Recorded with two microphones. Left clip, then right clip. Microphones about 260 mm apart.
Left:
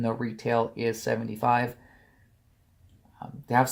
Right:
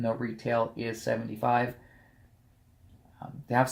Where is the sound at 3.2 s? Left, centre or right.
Left.